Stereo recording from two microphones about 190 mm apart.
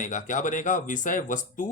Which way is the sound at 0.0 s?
40° left (ahead or behind).